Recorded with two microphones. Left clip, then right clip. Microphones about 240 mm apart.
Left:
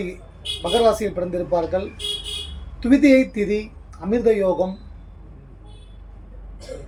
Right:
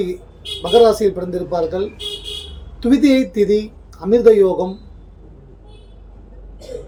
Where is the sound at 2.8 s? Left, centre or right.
Centre.